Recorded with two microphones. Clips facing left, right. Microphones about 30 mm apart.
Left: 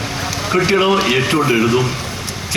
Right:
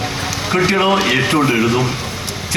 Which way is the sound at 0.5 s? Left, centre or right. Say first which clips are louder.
Even; centre.